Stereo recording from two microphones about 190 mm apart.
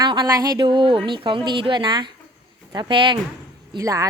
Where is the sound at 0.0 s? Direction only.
20° right (ahead or behind).